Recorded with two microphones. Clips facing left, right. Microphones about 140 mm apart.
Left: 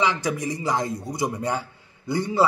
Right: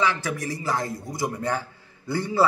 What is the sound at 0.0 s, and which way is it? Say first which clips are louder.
A man's voice: left 2 dB; 15° left (ahead or behind).